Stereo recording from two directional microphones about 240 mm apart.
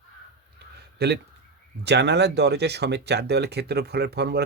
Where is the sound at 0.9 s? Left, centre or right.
Right.